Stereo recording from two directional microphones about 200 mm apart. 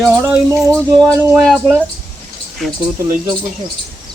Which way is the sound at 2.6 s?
Centre (ahead or behind).